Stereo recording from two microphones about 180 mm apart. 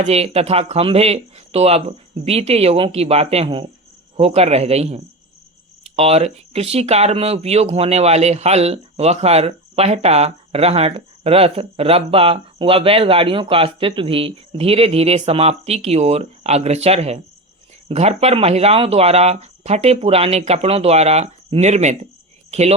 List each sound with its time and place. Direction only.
0.0 s speech: 35° right (ahead or behind)